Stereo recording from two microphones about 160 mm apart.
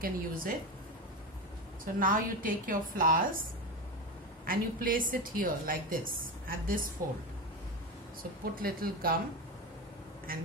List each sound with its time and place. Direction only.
0.0 s a woman's voice: 60° right (ahead or behind)
2.0 s a woman's voice: 60° right (ahead or behind)
4.5 s a woman's voice: 65° right (ahead or behind)
8.2 s a woman's voice: 65° right (ahead or behind)
10.3 s a woman's voice: 65° right (ahead or behind)